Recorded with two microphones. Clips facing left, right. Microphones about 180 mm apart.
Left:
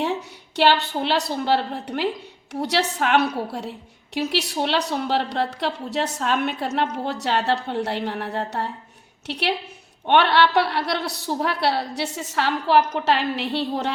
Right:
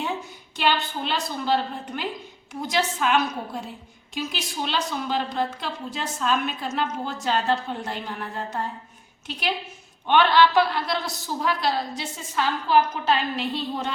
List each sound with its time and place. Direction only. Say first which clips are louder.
0.5 s a woman's voice: left 5 dB; 75° left (ahead or behind)